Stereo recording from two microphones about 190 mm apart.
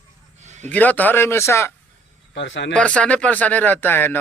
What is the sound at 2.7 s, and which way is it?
Speech, 5° left (ahead or behind).